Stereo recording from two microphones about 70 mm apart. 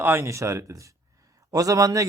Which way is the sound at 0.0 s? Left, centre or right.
Right.